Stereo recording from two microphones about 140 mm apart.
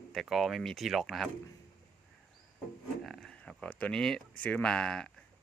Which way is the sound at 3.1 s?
5° left (ahead or behind).